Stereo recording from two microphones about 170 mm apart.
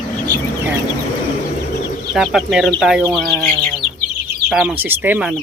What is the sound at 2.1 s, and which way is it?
Speech, centre (ahead or behind).